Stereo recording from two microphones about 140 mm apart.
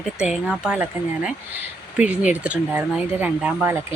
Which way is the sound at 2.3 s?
10° right (ahead or behind).